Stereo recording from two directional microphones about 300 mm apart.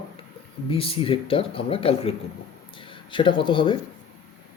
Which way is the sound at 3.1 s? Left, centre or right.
Centre.